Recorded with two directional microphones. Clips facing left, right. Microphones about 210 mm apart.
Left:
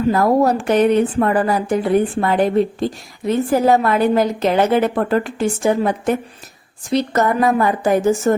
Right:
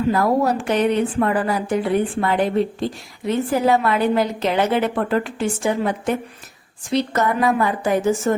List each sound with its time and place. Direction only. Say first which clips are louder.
0.1 s a woman's voice: left 4 dB; 45° left (ahead or behind)